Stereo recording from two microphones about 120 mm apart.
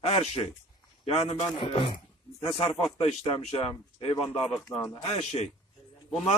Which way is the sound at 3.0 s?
60° left (ahead or behind).